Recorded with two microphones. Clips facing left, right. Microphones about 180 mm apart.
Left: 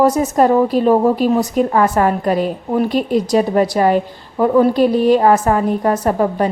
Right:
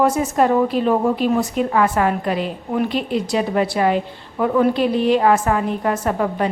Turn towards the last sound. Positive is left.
turn(degrees=40)  # may be behind; listen again after turning